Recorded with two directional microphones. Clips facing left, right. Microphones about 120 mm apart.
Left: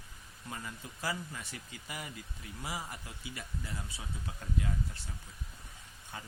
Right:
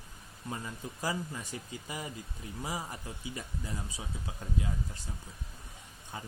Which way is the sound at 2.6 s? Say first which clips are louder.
Right 3 dB; 15° right (ahead or behind).